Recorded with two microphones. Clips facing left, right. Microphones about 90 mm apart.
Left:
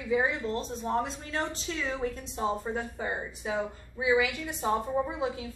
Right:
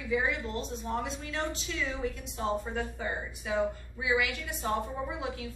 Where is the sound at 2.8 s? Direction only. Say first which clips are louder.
Left 1 dB; 20° left (ahead or behind).